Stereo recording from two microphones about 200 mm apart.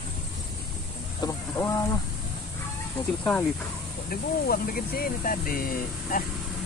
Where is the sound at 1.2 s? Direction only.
20° left (ahead or behind).